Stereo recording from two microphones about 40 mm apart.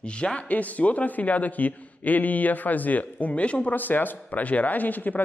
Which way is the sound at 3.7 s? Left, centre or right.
Left.